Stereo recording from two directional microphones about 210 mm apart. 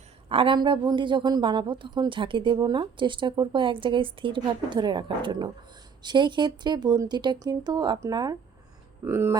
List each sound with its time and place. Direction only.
0.3 s a woman's voice: 25° right (ahead or behind)